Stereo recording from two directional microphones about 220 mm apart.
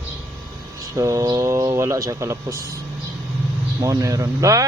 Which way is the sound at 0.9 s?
15° right (ahead or behind).